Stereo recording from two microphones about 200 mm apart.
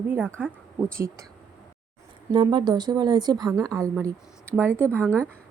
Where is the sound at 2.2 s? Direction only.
20° right (ahead or behind).